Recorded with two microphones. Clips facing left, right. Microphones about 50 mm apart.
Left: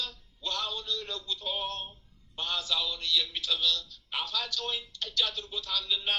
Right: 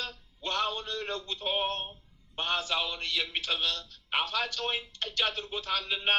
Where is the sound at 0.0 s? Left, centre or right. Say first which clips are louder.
Right 1 dB; right.